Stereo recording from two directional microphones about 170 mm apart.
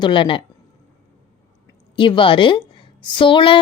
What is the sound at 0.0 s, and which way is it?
Speech, 30° left (ahead or behind).